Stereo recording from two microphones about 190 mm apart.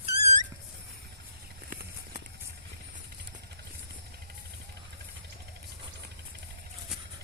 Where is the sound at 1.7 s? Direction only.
50° right (ahead or behind).